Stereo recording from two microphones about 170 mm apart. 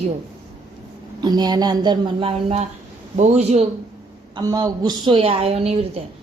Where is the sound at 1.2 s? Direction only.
25° right (ahead or behind); by 3.6 s 40° right (ahead or behind).